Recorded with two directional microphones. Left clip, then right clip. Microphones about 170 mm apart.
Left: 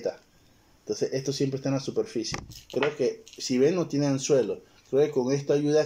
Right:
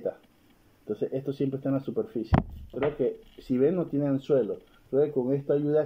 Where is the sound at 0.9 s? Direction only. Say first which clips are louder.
Left 2 dB; 25° left (ahead or behind).